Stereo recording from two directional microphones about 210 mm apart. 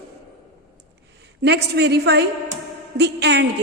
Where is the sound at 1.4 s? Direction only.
55° right (ahead or behind).